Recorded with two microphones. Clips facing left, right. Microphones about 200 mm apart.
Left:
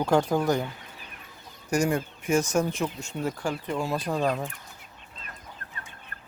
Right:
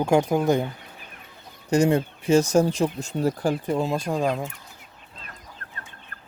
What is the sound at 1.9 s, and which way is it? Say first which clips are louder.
Speech: right 6 dB; 30° right (ahead or behind).